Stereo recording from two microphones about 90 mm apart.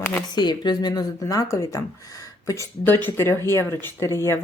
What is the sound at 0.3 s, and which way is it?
Speech, 55° left (ahead or behind).